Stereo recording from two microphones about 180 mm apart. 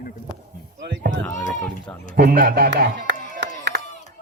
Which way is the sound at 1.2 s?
15° left (ahead or behind).